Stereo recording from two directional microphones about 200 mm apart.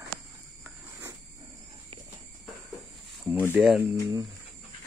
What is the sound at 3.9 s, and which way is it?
Speech, 15° right (ahead or behind).